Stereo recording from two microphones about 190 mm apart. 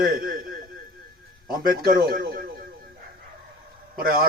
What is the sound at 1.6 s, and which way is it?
Speech, 55° right (ahead or behind).